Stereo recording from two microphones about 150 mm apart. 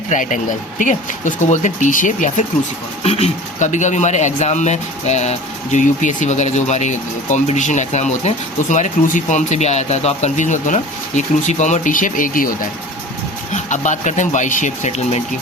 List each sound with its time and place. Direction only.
0.1 s speech: 60° left (ahead or behind)
3.0 s speech: 45° left (ahead or behind); by 12.5 s 65° left (ahead or behind)
13.5 s speech: 55° left (ahead or behind)